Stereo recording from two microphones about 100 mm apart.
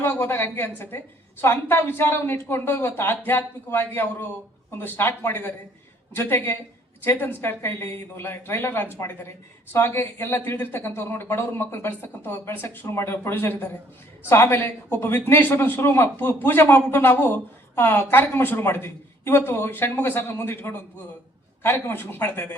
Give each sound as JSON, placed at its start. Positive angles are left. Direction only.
{"t": 0.0, "sound": "a man's voice", "side_deg": 20}